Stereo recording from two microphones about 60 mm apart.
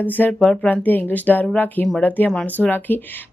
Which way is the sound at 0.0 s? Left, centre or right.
Left.